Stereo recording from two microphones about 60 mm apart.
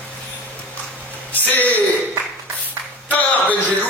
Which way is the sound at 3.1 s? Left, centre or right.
Left.